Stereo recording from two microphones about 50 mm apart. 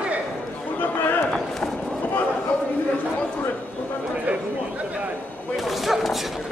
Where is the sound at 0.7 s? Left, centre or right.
Left.